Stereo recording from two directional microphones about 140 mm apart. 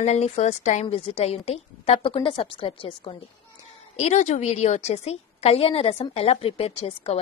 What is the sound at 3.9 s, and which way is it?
A woman's voice, 55° left (ahead or behind).